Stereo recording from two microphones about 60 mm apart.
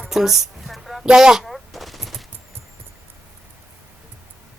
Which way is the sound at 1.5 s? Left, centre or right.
Centre.